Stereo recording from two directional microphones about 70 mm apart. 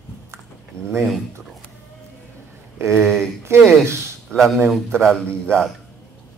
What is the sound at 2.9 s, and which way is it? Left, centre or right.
Speech, centre.